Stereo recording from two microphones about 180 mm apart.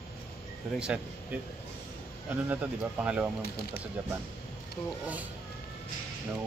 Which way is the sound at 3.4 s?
60° left (ahead or behind).